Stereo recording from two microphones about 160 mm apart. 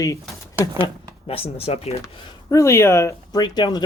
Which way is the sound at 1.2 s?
35° left (ahead or behind).